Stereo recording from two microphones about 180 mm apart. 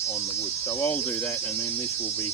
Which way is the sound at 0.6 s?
10° left (ahead or behind).